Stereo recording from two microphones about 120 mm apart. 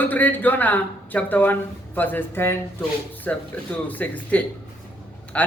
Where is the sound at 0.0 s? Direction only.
15° left (ahead or behind).